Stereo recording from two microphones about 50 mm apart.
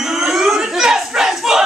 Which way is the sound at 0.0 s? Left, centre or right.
Centre.